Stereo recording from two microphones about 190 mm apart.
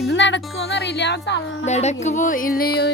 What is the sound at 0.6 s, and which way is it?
Music, 60° left (ahead or behind).